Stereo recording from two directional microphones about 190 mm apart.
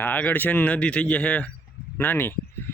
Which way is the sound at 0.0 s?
10° left (ahead or behind).